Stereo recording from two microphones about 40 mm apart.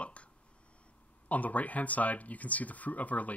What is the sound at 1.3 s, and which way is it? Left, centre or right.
Speech, left.